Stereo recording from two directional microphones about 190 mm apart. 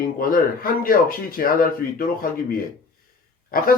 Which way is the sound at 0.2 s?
50° left (ahead or behind).